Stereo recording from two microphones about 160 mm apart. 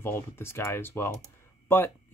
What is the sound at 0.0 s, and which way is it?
Speech, 15° left (ahead or behind).